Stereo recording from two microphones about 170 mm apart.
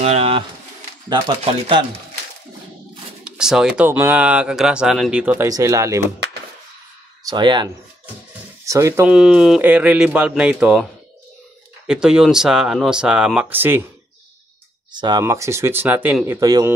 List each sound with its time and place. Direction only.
0.0 s pigeon: 35° right (ahead or behind)
1.0 s speech: 25° right (ahead or behind)
3.3 s speech: 5° right (ahead or behind)
7.2 s speech: 25° right (ahead or behind)
8.6 s speech: 15° right (ahead or behind)
9.1 s speech: 5° right (ahead or behind)
11.9 s speech: 5° right (ahead or behind)
14.9 s speech: 25° right (ahead or behind)